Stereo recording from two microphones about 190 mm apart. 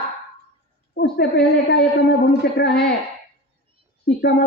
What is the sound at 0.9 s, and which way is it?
A woman's voice, 60° left (ahead or behind).